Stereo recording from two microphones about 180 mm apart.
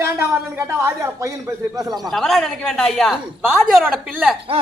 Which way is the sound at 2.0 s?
Centre (ahead or behind).